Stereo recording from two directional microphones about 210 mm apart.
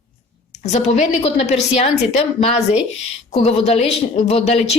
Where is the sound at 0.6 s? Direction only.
30° left (ahead or behind).